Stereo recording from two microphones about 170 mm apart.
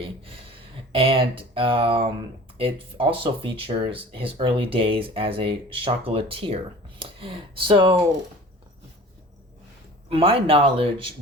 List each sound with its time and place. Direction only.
0.9 s speech: 30° right (ahead or behind)
10.1 s speech: 35° right (ahead or behind)